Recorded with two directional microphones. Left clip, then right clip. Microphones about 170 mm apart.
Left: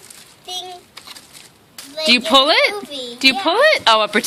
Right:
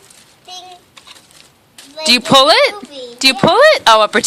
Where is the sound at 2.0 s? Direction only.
35° right (ahead or behind).